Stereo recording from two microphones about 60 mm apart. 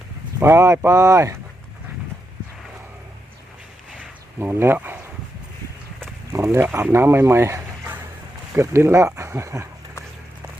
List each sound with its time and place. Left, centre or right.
0.4 s speech: right
4.4 s speech: right
6.3 s speech: right